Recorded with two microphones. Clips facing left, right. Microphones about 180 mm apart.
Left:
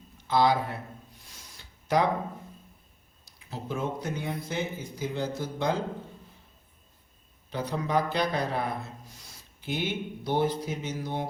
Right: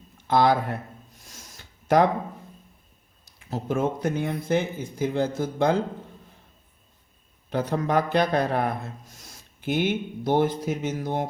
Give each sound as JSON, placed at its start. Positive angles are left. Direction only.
{"t": 0.3, "sound": "a sound", "side_deg": -50}
{"t": 3.5, "sound": "speech", "side_deg": -50}
{"t": 7.5, "sound": "speech", "side_deg": -50}